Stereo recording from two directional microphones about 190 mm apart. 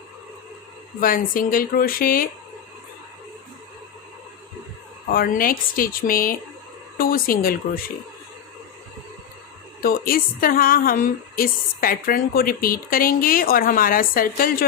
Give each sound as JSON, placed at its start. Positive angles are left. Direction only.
{"t": 0.9, "sound": "a woman's voice", "side_deg": 50}
{"t": 5.0, "sound": "a woman's voice", "side_deg": 50}
{"t": 9.8, "sound": "a woman's voice", "side_deg": 50}